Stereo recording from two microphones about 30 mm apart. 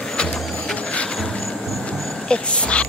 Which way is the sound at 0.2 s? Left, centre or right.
Left.